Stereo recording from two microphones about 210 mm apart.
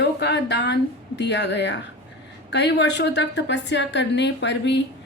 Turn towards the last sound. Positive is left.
turn(degrees=55)  # may be behind; listen again after turning